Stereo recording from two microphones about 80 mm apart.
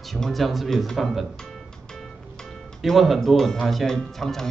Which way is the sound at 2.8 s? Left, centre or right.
Centre.